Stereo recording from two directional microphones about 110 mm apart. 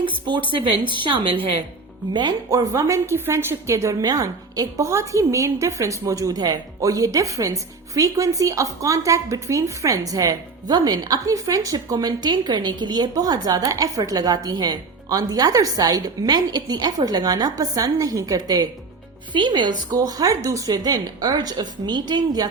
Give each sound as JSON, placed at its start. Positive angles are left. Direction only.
{"t": 0.0, "sound": "a woman's voice", "side_deg": -45}
{"t": 2.1, "sound": "a woman's voice", "side_deg": -40}